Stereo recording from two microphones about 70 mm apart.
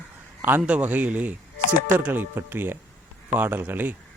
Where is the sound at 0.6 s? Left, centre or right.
Right.